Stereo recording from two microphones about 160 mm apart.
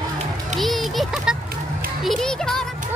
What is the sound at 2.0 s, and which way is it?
Music, 5° left (ahead or behind).